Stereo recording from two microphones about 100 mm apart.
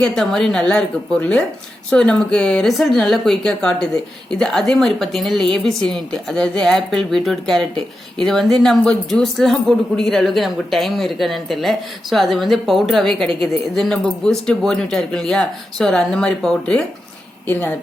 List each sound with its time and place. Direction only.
0.2 s a man's voice: 5° left (ahead or behind)
17.5 s speech: 20° left (ahead or behind)